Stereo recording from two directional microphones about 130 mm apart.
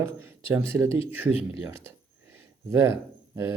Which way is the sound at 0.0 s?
15° right (ahead or behind).